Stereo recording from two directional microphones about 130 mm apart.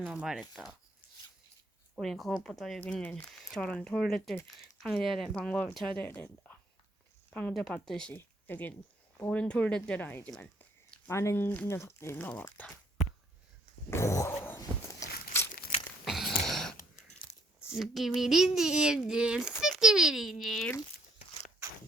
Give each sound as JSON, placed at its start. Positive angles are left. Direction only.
{"t": 0.0, "sound": "speech", "side_deg": -10}
{"t": 2.0, "sound": "speech", "side_deg": 0}
{"t": 8.1, "sound": "speech", "side_deg": 15}
{"t": 10.4, "sound": "a sound", "side_deg": 10}
{"t": 11.1, "sound": "speech", "side_deg": 20}
{"t": 13.9, "sound": "cat", "side_deg": 20}
{"t": 15.0, "sound": "a sound", "side_deg": 20}
{"t": 16.0, "sound": "a sound", "side_deg": 0}
{"t": 17.7, "sound": "speech", "side_deg": 0}